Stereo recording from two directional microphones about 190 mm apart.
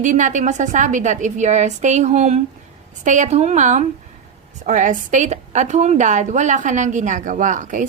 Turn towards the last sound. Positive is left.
turn(degrees=-40)  # may be behind; listen again after turning